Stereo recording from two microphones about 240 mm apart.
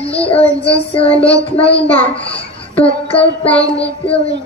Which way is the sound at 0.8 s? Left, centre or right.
Left.